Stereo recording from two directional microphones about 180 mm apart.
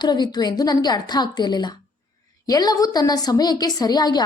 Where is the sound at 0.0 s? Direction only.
25° left (ahead or behind).